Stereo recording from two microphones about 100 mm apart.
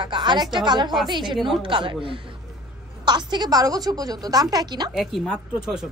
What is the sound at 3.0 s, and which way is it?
A woman's voice, 45° right (ahead or behind).